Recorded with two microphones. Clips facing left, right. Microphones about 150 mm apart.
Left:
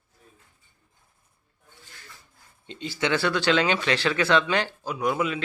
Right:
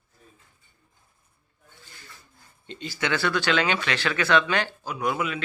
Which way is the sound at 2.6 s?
25° left (ahead or behind).